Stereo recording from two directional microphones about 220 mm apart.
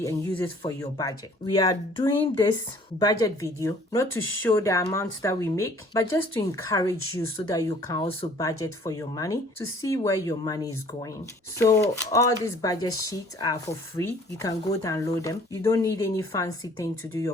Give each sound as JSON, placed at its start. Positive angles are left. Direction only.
{"t": 0.0, "sound": "speech", "side_deg": 10}
{"t": 3.0, "sound": "speech", "side_deg": 15}